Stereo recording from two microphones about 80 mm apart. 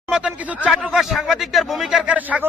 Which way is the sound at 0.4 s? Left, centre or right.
Centre.